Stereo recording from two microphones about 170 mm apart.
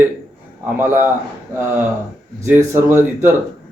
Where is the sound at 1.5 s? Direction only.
15° right (ahead or behind).